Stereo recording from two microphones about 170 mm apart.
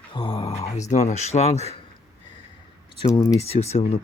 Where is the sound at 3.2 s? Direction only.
15° left (ahead or behind).